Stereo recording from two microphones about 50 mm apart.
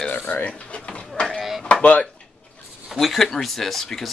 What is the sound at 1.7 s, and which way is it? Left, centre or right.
Speech, left.